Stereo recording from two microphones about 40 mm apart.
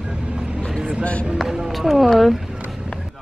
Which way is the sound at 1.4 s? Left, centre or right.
Centre.